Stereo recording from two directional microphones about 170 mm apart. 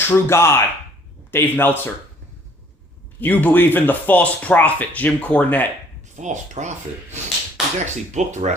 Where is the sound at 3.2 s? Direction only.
10° left (ahead or behind).